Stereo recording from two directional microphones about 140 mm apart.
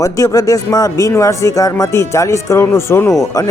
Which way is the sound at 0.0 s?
25° left (ahead or behind).